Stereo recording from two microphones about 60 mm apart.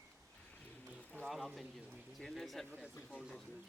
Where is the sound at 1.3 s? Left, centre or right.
Centre.